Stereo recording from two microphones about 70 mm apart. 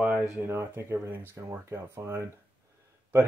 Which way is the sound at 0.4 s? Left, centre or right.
Right.